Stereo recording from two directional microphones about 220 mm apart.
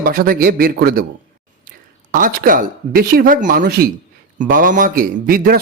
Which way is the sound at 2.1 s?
40° right (ahead or behind).